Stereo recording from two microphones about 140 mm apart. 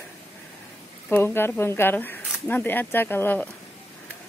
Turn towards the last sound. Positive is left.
turn(degrees=15)  # may be behind; listen again after turning